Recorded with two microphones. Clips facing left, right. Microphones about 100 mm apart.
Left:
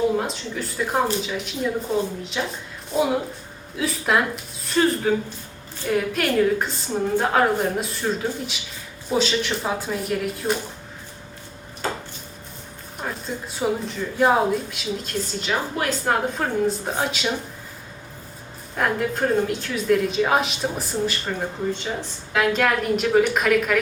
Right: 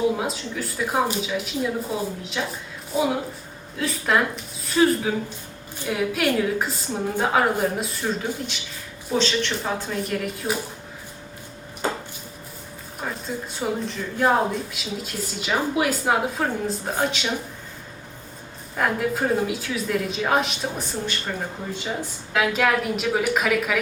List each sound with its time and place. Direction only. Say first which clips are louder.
0.2 s speech: left 1 dB; 5° right (ahead or behind)
11.8 s a sound: right 1 dB; 20° right (ahead or behind)
13.0 s speech: even; centre (ahead or behind)
18.8 s speech: left 1 dB; 5° right (ahead or behind)